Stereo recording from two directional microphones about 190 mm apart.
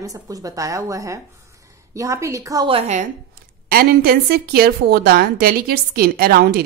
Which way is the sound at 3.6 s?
55° right (ahead or behind).